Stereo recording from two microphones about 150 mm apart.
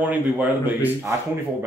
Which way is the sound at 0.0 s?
10° right (ahead or behind).